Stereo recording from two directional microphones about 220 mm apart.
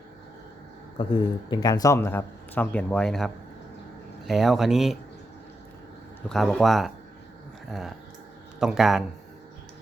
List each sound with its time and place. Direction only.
0.9 s speech: 20° left (ahead or behind); by 4.9 s centre (ahead or behind)
6.2 s speech: centre (ahead or behind)